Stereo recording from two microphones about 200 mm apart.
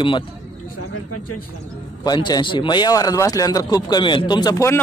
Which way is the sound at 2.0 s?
20° left (ahead or behind).